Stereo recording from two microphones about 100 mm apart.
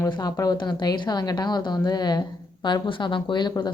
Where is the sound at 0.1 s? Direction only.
40° left (ahead or behind).